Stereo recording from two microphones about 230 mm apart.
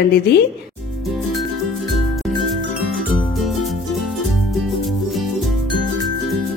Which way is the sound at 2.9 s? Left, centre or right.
Centre.